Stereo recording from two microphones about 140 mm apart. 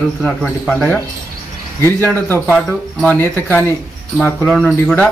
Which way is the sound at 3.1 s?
15° left (ahead or behind).